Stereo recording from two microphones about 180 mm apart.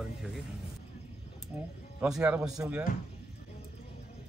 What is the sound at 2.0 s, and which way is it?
Speech, 5° right (ahead or behind).